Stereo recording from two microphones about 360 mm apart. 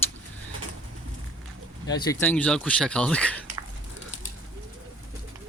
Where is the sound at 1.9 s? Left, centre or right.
Centre.